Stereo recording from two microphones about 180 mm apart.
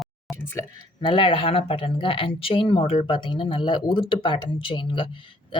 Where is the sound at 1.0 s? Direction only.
30° left (ahead or behind).